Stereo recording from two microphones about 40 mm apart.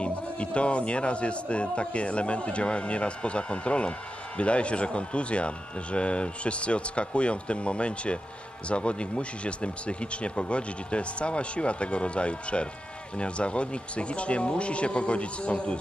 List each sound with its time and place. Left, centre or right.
0.0 s speech: left